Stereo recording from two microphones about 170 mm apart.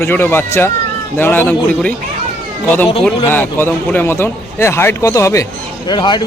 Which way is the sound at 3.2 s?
10° left (ahead or behind).